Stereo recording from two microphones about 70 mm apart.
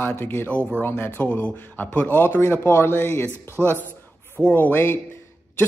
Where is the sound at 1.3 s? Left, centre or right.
Left.